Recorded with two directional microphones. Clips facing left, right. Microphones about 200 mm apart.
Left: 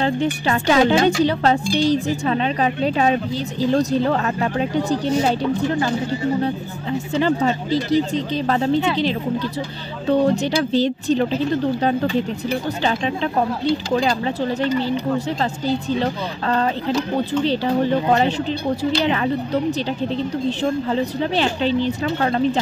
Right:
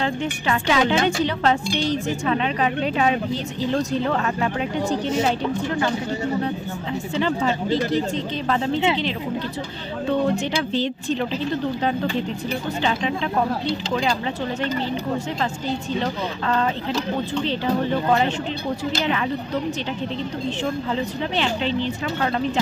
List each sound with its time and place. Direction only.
0.0 s speech: 40° left (ahead or behind)
7.2 s speech: 40° left (ahead or behind)
10.1 s speech: 40° left (ahead or behind)
20.9 s speech: 40° left (ahead or behind)